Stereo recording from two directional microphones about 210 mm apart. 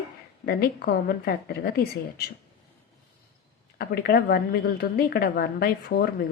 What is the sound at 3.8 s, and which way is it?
A woman's voice, 45° left (ahead or behind).